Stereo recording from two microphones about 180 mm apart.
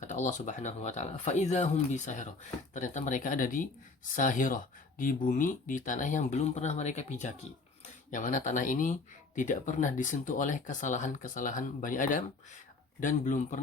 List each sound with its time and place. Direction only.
0.0 s speech: 45° left (ahead or behind)